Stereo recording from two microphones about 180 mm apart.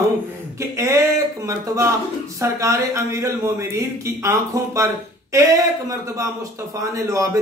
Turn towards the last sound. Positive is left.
turn(degrees=-20)  # may be behind; listen again after turning